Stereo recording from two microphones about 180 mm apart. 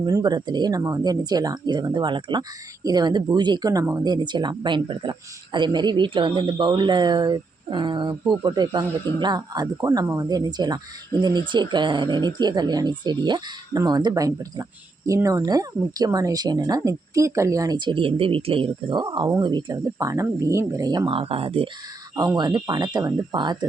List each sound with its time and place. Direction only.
0.0 s speech: 20° right (ahead or behind)
22.1 s speech: 20° right (ahead or behind)